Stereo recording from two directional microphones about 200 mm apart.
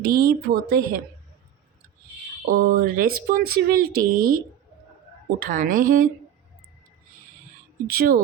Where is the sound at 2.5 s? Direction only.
45° right (ahead or behind).